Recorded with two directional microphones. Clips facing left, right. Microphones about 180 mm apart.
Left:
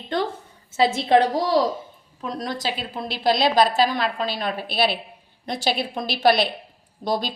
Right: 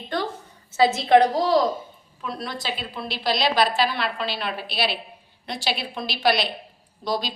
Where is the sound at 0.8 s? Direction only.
30° left (ahead or behind).